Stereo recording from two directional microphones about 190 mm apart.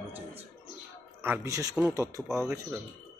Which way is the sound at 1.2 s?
10° right (ahead or behind).